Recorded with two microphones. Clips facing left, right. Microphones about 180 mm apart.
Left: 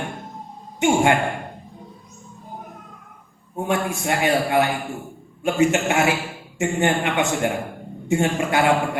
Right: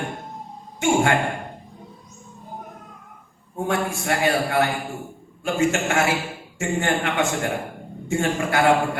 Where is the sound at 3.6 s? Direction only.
20° left (ahead or behind).